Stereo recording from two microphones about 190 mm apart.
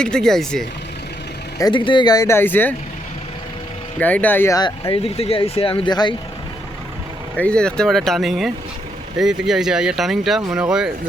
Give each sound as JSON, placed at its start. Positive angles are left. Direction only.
{"t": 0.0, "sound": "speech", "side_deg": 5}
{"t": 1.5, "sound": "speech", "side_deg": 25}
{"t": 4.0, "sound": "speech", "side_deg": 10}
{"t": 4.8, "sound": "speech", "side_deg": 30}
{"t": 7.3, "sound": "speech", "side_deg": 5}